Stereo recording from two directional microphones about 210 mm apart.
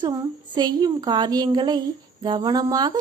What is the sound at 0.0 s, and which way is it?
A woman's voice, 20° right (ahead or behind).